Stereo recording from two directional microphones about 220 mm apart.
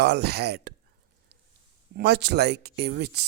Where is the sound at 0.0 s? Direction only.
50° right (ahead or behind).